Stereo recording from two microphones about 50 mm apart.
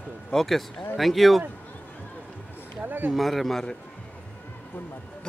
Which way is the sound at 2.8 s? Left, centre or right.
Right.